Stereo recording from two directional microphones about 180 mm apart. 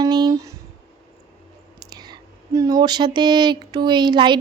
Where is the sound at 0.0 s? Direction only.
20° right (ahead or behind).